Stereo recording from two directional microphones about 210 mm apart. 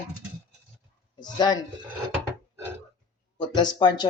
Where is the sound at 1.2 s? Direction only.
20° left (ahead or behind).